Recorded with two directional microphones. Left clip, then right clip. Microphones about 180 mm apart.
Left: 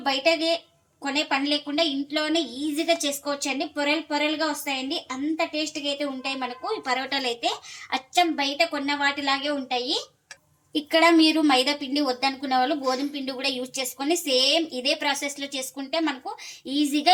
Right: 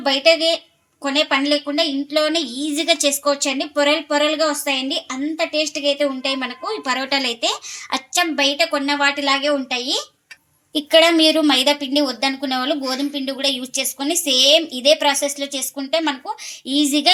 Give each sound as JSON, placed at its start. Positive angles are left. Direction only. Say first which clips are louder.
{"t": 0.0, "sound": "a woman's voice", "louder": "right 7 dB", "side_deg": -55}